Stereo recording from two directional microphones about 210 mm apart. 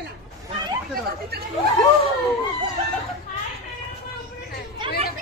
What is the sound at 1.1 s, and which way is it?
Chatter, 50° right (ahead or behind).